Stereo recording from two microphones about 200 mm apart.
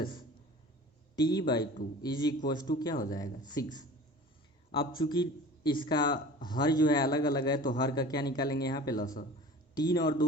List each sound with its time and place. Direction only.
1.1 s speech: 20° left (ahead or behind)
4.8 s speech: 45° left (ahead or behind)
5.0 s speech: 20° left (ahead or behind)